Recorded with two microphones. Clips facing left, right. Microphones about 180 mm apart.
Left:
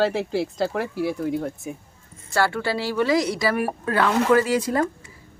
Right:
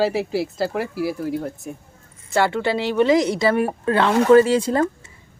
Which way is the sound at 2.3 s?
20° right (ahead or behind).